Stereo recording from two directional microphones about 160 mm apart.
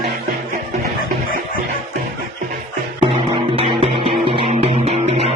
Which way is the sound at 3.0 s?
30° right (ahead or behind).